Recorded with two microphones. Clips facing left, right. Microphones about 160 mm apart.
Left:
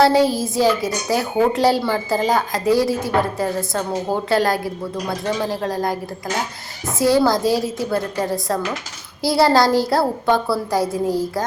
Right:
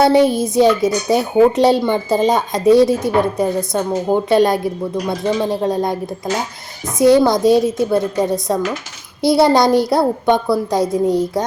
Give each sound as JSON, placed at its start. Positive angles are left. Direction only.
{"t": 0.0, "sound": "speech", "side_deg": -20}